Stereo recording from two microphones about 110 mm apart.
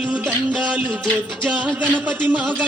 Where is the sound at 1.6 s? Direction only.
15° right (ahead or behind).